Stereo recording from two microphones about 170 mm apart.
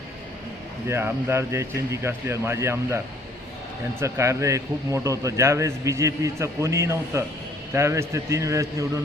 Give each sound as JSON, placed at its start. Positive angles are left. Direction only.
{"t": 0.9, "sound": "speech", "side_deg": -15}
{"t": 4.0, "sound": "speech", "side_deg": -15}